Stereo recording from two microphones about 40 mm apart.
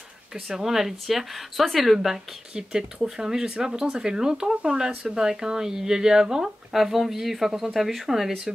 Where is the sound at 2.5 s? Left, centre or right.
Centre.